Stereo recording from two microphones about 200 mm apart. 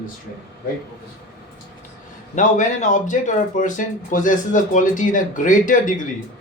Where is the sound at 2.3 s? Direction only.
40° left (ahead or behind).